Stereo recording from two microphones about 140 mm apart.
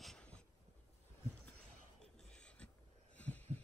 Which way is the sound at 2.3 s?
5° left (ahead or behind).